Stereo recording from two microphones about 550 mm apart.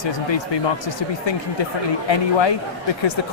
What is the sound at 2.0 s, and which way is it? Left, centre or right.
Speech, left.